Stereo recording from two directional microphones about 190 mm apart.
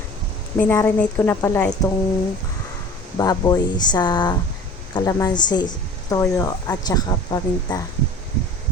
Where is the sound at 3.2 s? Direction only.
20° left (ahead or behind).